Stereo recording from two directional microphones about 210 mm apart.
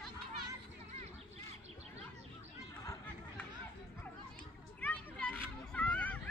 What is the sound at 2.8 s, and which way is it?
Chatter, 15° left (ahead or behind).